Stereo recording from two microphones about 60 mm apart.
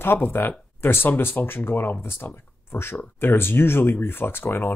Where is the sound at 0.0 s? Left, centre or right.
Left.